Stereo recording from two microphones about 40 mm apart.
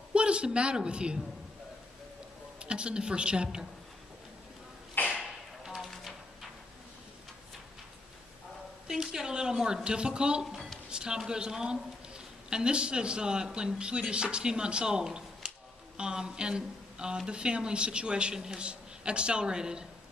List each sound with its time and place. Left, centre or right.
0.1 s a woman's voice: right
2.6 s a man's voice: right
5.0 s a sound: left
5.6 s music: centre
8.8 s a woman's voice: centre